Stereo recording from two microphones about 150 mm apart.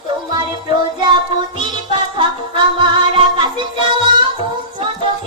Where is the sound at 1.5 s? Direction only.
30° right (ahead or behind).